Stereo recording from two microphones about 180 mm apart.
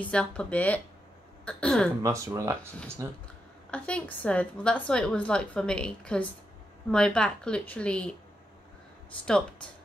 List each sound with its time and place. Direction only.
0.0 s a woman's voice: 5° left (ahead or behind)
2.0 s speech: 15° right (ahead or behind)
3.7 s a woman's voice: 5° left (ahead or behind)